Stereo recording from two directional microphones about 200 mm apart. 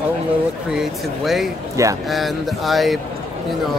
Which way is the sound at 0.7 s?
Centre (ahead or behind).